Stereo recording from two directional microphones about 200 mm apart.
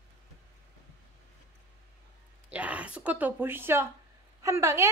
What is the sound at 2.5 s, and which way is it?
A woman's voice, 5° right (ahead or behind).